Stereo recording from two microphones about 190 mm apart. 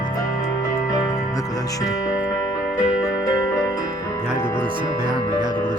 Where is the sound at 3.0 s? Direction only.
20° left (ahead or behind).